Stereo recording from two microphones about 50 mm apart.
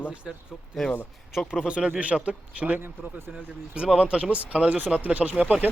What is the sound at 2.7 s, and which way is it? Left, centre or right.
Speech, right.